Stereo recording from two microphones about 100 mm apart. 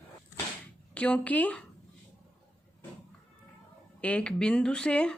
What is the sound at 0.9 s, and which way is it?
Speech, 15° left (ahead or behind).